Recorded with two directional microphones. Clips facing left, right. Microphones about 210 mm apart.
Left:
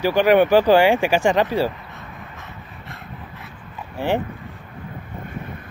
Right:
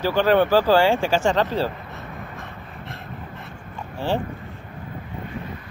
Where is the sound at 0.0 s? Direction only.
15° left (ahead or behind).